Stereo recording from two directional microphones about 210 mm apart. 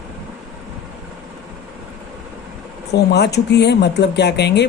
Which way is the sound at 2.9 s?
55° left (ahead or behind).